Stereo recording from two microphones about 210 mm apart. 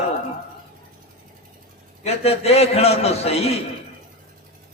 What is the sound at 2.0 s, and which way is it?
A man's voice, 30° left (ahead or behind).